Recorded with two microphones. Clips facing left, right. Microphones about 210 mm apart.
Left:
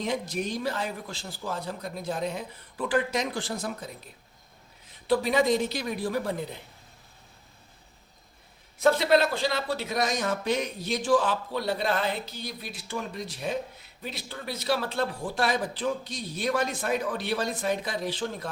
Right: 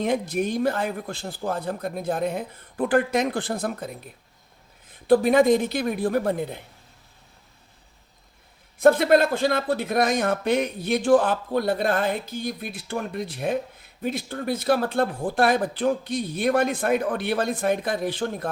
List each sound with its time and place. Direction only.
0.0 s a man's voice: 55° right (ahead or behind)
8.8 s speech: 50° right (ahead or behind)